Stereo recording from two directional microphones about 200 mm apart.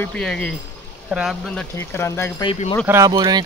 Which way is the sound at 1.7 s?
15° left (ahead or behind).